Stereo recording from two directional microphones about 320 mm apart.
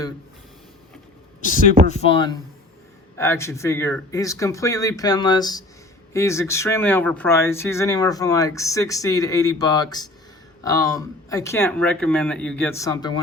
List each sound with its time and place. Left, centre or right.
1.9 s speech: centre